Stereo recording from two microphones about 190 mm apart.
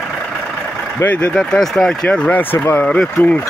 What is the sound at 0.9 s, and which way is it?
Speech, 10° left (ahead or behind).